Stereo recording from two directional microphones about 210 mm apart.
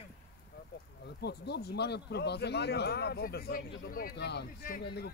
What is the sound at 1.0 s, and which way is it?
Speech, 50° left (ahead or behind).